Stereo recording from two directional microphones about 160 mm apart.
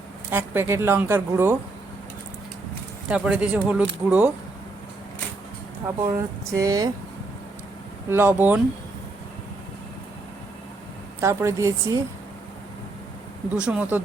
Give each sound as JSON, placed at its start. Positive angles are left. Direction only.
{"t": 0.3, "sound": "speech", "side_deg": -15}
{"t": 3.1, "sound": "speech", "side_deg": -5}
{"t": 6.1, "sound": "speech", "side_deg": -20}
{"t": 8.1, "sound": "speech", "side_deg": -15}
{"t": 11.2, "sound": "speech", "side_deg": -15}
{"t": 13.6, "sound": "speech", "side_deg": -5}